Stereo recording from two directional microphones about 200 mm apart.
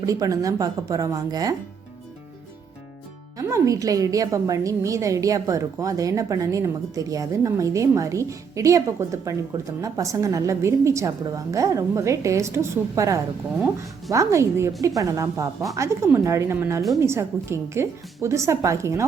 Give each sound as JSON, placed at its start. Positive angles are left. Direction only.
{"t": 0.0, "sound": "a woman's voice", "side_deg": -15}
{"t": 3.3, "sound": "a woman's voice", "side_deg": -15}